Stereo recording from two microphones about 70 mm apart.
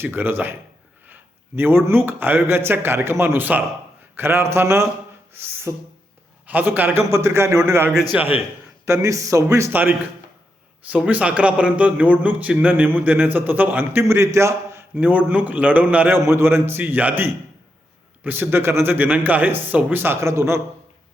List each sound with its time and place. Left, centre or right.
0.0 s a man's voice: right
6.5 s a man's voice: right
7.1 s speech: right
8.1 s a man's voice: centre
8.9 s a man's voice: right
10.8 s a man's voice: centre
14.1 s a man's voice: right
15.0 s a man's voice: right
16.1 s a man's voice: right